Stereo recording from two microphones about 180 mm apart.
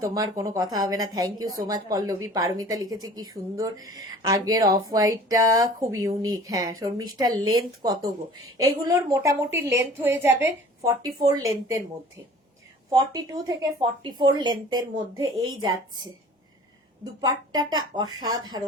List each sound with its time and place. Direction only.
0.0 s a woman's voice: 20° right (ahead or behind)
17.2 s speech: 25° right (ahead or behind)